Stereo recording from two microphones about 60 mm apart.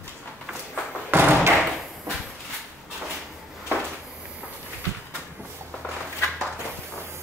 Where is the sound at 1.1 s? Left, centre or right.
Right.